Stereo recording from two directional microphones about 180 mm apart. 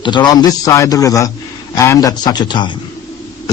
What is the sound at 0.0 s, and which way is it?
A man's voice, 25° left (ahead or behind).